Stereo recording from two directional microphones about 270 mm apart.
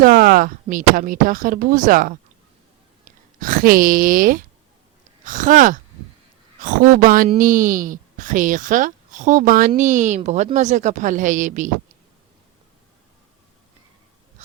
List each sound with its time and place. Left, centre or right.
0.0 s a woman's voice: right